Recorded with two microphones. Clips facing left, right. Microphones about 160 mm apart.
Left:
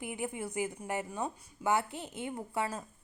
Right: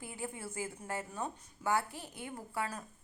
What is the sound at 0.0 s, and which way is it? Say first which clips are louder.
A woman's voice: left 5 dB; 15° left (ahead or behind).